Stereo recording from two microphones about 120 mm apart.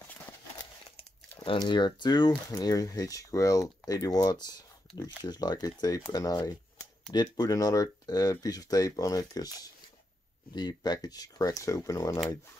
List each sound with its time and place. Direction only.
1.4 s speech: 45° left (ahead or behind); by 12.2 s 25° left (ahead or behind)